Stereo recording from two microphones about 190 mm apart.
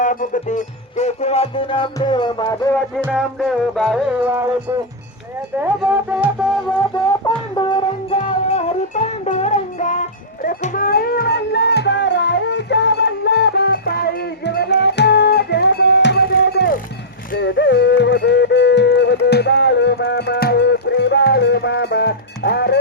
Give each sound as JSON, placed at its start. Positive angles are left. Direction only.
{"t": 0.0, "sound": "music", "side_deg": 45}
{"t": 3.0, "sound": "music", "side_deg": 0}
{"t": 4.3, "sound": "a sound", "side_deg": -15}
{"t": 5.9, "sound": "music", "side_deg": -10}
{"t": 7.3, "sound": "music", "side_deg": 25}
{"t": 8.2, "sound": "music", "side_deg": 35}
{"t": 17.3, "sound": "music", "side_deg": 70}